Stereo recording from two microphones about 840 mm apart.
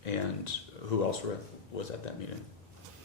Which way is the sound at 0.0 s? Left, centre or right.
Left.